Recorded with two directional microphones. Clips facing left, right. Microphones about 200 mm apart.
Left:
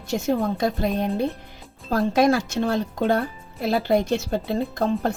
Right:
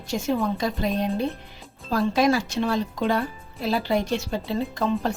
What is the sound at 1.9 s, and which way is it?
Speech, 50° left (ahead or behind).